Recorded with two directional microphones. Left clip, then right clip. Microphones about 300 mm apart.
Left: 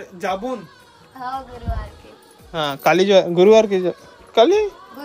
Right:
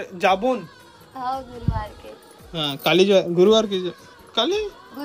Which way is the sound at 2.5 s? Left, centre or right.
Centre.